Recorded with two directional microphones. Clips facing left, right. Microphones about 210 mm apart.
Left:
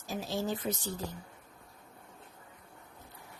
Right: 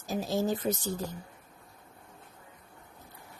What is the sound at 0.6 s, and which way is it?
Speech, 45° right (ahead or behind).